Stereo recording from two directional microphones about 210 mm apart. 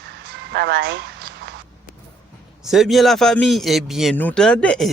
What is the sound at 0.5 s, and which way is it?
Speech, 55° right (ahead or behind).